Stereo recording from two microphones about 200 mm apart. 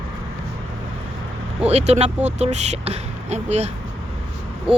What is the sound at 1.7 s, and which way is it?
Speech, 35° right (ahead or behind).